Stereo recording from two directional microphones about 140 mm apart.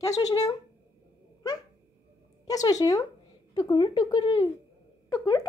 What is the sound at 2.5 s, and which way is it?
Speech, 25° left (ahead or behind).